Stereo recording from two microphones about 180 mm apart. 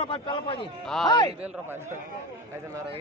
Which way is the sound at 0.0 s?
30° left (ahead or behind).